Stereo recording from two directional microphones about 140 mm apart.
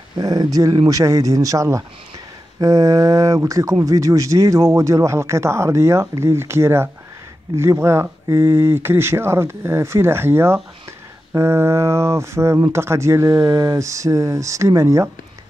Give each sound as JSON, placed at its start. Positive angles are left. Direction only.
{"t": 0.2, "sound": "speech", "side_deg": -25}